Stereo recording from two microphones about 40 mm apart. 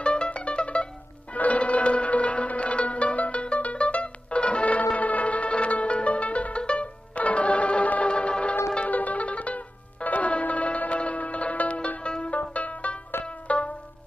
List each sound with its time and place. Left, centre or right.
0.0 s music: left
1.3 s zither: left
8.1 s music: left
8.8 s music: left
12.4 s music: left